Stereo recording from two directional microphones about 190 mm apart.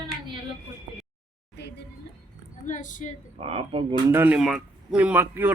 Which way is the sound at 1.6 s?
60° left (ahead or behind).